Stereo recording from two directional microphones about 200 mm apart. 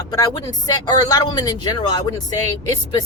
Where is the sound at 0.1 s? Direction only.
20° left (ahead or behind).